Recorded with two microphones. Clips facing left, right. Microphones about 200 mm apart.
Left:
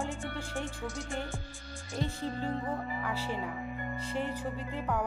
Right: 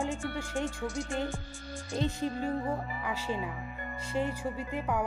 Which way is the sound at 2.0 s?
15° right (ahead or behind).